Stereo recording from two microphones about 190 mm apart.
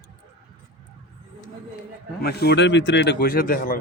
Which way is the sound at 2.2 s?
55° left (ahead or behind).